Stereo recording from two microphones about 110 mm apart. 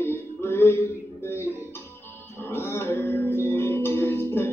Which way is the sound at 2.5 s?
20° left (ahead or behind).